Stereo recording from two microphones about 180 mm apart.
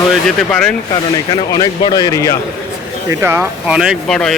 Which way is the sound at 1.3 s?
25° left (ahead or behind).